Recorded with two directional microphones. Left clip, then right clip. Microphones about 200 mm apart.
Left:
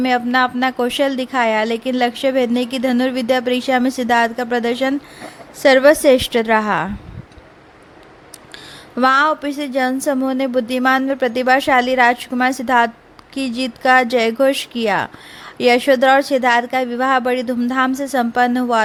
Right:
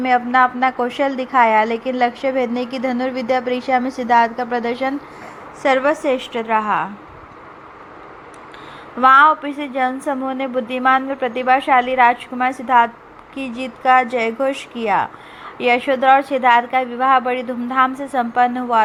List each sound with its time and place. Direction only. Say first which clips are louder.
0.0 s a woman's voice: right 1 dB; 35° left (ahead or behind)
5.6 s a woman's voice: left 6 dB; 50° left (ahead or behind)
9.0 s a woman's voice: right 3 dB; 45° left (ahead or behind)